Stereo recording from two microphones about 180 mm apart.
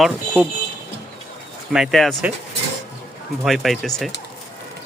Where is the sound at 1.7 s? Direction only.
Centre (ahead or behind).